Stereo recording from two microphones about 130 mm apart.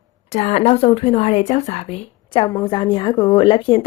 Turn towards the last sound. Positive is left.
turn(degrees=40)  # may be behind; listen again after turning